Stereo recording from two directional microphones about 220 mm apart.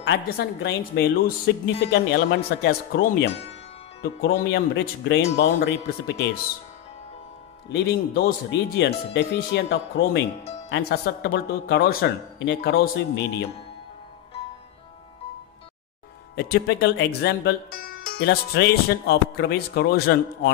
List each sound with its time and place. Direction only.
0.0 s speech: 55° left (ahead or behind)
7.7 s speech: 50° left (ahead or behind)
16.3 s speech: 50° left (ahead or behind)